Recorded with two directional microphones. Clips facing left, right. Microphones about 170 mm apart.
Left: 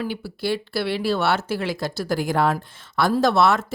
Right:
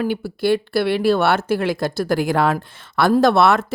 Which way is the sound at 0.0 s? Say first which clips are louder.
Right 6 dB; 55° right (ahead or behind).